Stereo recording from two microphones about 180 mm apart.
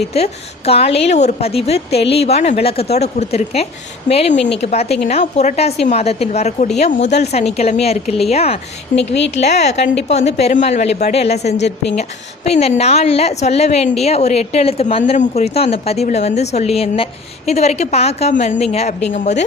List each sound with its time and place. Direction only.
0.1 s a woman's voice: 35° left (ahead or behind)
8.9 s a woman's voice: 45° left (ahead or behind)